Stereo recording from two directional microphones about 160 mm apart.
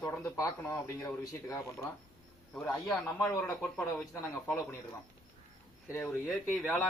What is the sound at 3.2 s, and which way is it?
A man's voice, 5° left (ahead or behind).